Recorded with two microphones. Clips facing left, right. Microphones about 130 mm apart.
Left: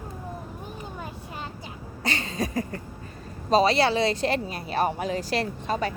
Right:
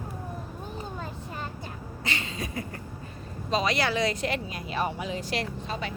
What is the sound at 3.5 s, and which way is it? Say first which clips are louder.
Speech: left 6 dB; 35° left (ahead or behind).